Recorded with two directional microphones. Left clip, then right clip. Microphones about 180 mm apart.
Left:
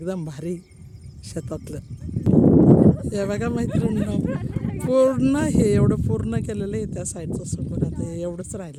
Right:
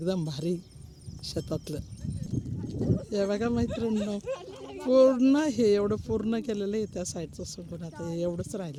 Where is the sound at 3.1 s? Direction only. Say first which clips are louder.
Left 3 dB; 10° left (ahead or behind).